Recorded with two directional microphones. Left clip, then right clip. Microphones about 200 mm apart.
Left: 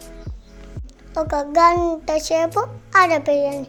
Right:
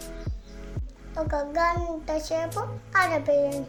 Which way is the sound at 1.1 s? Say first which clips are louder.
Left 8 dB; 45° left (ahead or behind).